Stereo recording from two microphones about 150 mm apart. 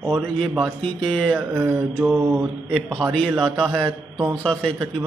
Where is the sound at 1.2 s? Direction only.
5° right (ahead or behind).